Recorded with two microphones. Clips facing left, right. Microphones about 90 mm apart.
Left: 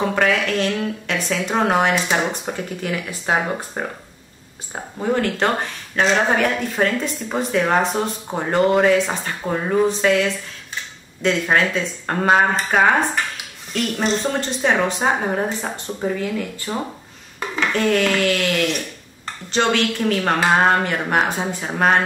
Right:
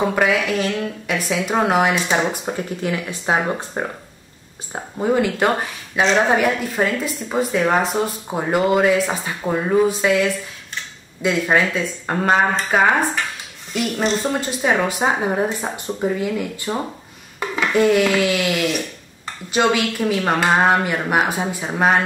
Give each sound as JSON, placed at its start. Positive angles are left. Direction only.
{"t": 0.0, "sound": "speech", "side_deg": -5}
{"t": 2.5, "sound": "speech", "side_deg": -20}
{"t": 3.3, "sound": "speech", "side_deg": -5}